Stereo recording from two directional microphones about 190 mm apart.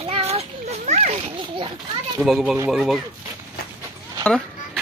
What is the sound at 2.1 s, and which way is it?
Speech, centre (ahead or behind).